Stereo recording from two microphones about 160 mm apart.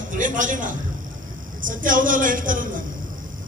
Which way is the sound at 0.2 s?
55° right (ahead or behind).